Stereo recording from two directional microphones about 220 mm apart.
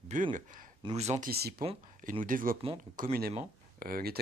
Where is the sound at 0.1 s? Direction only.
35° right (ahead or behind).